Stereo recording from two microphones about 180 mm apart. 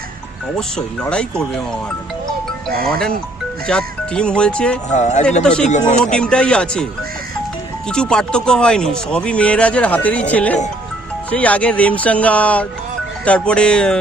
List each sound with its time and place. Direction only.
0.5 s speech: 5° left (ahead or behind)
2.6 s speech: 55° right (ahead or behind)
3.7 s speech: 5° left (ahead or behind)
4.9 s speech: 40° left (ahead or behind)
5.4 s speech: 5° left (ahead or behind)
7.9 s speech: 5° left (ahead or behind)